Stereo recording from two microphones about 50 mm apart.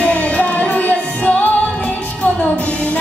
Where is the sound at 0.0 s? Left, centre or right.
Left.